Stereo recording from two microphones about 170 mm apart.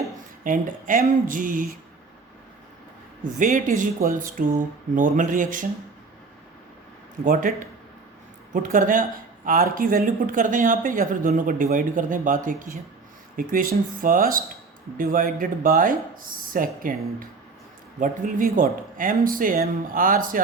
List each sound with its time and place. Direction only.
0.4 s speech: 50° right (ahead or behind)
3.3 s speech: 50° right (ahead or behind)
8.5 s speech: 55° right (ahead or behind)